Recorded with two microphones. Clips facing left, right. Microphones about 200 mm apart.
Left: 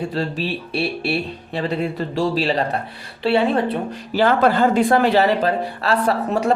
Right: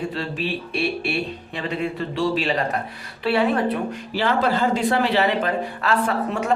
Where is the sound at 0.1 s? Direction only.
35° left (ahead or behind).